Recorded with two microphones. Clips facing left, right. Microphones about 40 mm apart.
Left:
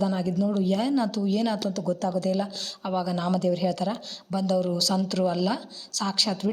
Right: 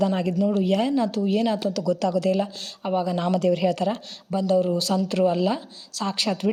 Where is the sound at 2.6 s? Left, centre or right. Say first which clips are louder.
Right 3 dB; right.